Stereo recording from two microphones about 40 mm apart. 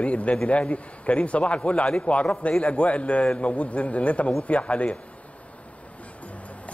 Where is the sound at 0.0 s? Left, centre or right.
Left.